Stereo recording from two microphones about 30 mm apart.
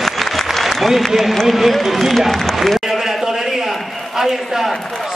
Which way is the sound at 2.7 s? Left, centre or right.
Centre.